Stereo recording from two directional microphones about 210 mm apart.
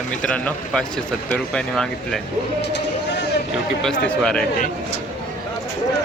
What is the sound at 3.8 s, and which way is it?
Speech, 5° left (ahead or behind).